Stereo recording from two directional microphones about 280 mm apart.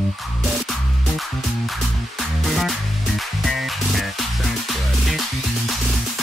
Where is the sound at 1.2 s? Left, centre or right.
Centre.